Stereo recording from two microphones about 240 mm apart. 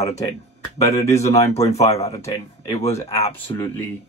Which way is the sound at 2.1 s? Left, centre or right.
Centre.